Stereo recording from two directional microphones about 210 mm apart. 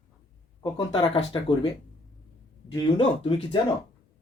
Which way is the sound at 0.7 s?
25° left (ahead or behind).